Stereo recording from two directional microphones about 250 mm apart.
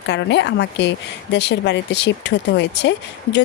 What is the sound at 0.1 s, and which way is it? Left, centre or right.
Speech, left.